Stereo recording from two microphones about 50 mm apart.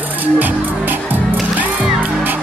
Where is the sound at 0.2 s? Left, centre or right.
Right.